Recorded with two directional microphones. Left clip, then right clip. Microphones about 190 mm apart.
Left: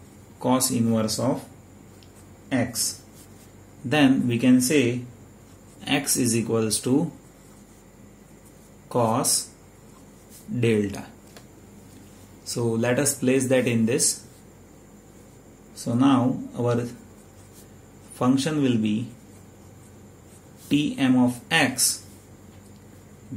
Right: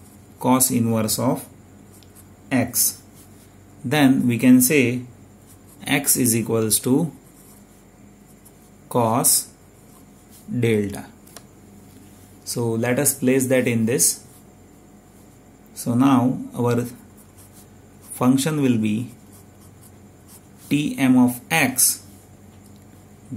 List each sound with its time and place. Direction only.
0.4 s speech: 45° right (ahead or behind)
2.5 s speech: 45° right (ahead or behind)
3.9 s speech: 40° right (ahead or behind)
8.8 s speech: 40° right (ahead or behind)
10.6 s speech: 30° right (ahead or behind)
12.4 s speech: 30° right (ahead or behind)
15.7 s speech: 45° right (ahead or behind)
18.1 s speech: 45° right (ahead or behind)
20.6 s speech: 40° right (ahead or behind)